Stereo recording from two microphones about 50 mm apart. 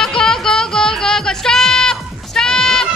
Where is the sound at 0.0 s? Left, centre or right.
Centre.